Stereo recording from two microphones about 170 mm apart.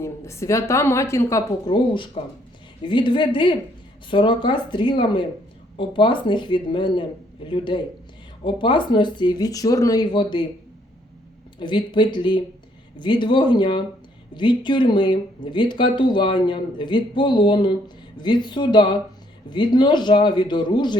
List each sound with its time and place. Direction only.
0.0 s speech: 15° left (ahead or behind)
11.6 s speech: 30° left (ahead or behind)